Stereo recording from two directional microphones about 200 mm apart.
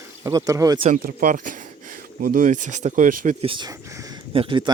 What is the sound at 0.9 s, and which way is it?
Speech, 40° right (ahead or behind).